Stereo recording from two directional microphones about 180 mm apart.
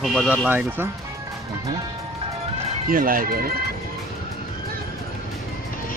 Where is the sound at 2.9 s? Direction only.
50° right (ahead or behind).